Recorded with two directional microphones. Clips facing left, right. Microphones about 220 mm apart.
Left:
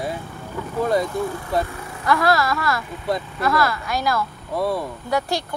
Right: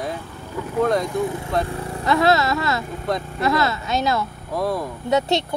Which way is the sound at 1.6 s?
25° right (ahead or behind).